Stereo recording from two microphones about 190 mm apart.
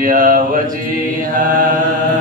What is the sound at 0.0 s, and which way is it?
Mantra, 45° right (ahead or behind).